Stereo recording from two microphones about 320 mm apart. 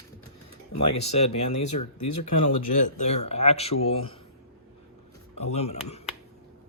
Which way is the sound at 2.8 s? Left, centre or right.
Left.